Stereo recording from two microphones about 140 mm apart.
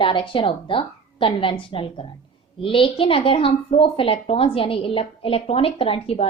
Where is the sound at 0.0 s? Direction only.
35° left (ahead or behind).